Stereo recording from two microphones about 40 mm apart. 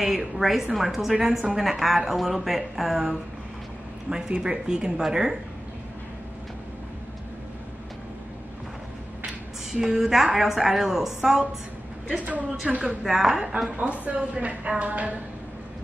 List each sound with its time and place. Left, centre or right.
0.0 s speech: centre
4.1 s speech: centre
9.7 s a woman's voice: centre
12.7 s a woman's voice: centre
13.9 s a woman's voice: right